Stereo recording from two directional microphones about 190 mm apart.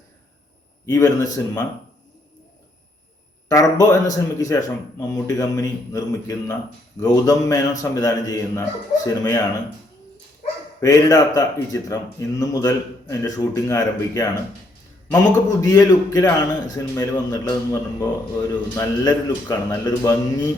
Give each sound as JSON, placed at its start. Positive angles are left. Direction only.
{"t": 0.9, "sound": "a man's voice", "side_deg": 15}
{"t": 3.5, "sound": "a man's voice", "side_deg": 20}
{"t": 10.8, "sound": "a man's voice", "side_deg": 20}